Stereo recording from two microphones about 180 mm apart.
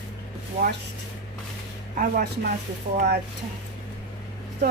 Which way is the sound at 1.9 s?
55° right (ahead or behind).